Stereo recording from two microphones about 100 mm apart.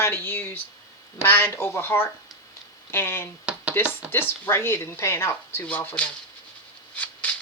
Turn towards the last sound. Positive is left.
turn(degrees=15)  # may be behind; listen again after turning